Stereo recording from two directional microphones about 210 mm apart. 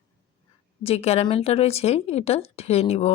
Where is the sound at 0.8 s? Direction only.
30° left (ahead or behind).